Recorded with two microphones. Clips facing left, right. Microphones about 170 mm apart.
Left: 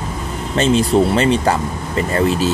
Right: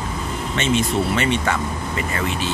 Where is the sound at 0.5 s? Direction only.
35° left (ahead or behind).